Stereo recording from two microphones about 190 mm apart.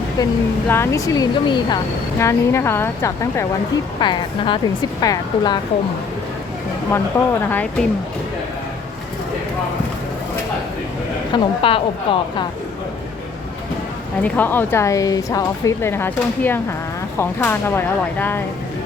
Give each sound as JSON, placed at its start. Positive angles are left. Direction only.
{"t": 0.7, "sound": "speech", "side_deg": 15}
{"t": 4.0, "sound": "a woman's voice", "side_deg": 25}
{"t": 7.1, "sound": "speech", "side_deg": 10}
{"t": 11.3, "sound": "a woman's voice", "side_deg": 30}
{"t": 14.2, "sound": "speech", "side_deg": 10}